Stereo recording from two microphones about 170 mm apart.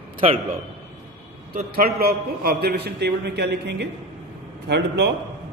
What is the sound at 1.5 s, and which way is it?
A man's voice, 60° right (ahead or behind).